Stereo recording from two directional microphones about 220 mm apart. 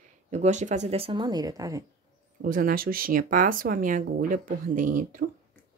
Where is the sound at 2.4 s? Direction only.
40° right (ahead or behind).